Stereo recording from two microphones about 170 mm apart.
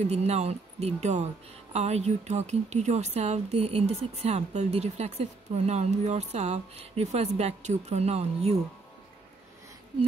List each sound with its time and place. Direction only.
0.0 s speech: 40° right (ahead or behind)